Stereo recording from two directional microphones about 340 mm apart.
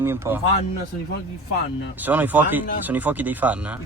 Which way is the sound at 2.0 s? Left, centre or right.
Centre.